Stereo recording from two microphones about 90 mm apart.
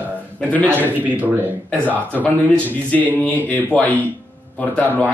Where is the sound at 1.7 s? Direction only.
20° left (ahead or behind).